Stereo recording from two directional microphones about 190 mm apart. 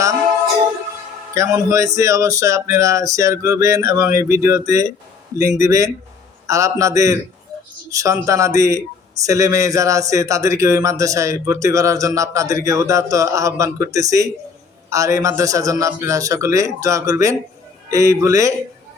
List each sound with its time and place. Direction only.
1.4 s speech: 15° right (ahead or behind)